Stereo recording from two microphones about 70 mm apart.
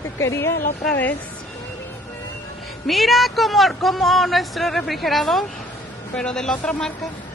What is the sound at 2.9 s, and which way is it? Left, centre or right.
Speech, centre.